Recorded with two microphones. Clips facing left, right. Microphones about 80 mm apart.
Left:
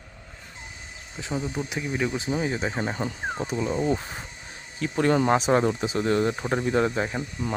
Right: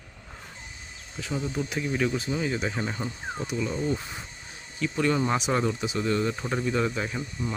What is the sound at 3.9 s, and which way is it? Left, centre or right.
Speech, left.